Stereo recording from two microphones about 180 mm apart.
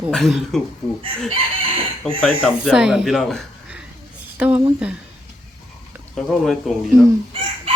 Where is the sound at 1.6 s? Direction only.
30° right (ahead or behind).